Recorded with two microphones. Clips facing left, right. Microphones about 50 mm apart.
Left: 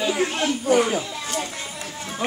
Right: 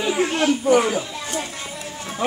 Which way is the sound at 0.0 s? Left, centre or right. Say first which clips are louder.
Right 2 dB; centre.